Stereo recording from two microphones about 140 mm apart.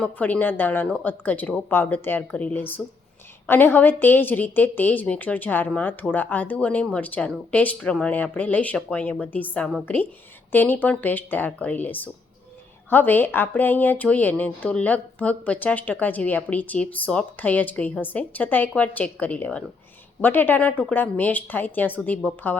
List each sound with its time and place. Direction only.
0.0 s a woman's voice: 10° left (ahead or behind)